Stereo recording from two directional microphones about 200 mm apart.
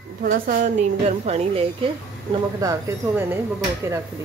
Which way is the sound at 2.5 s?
15° right (ahead or behind).